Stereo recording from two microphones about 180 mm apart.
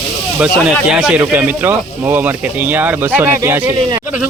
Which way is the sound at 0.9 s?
5° right (ahead or behind).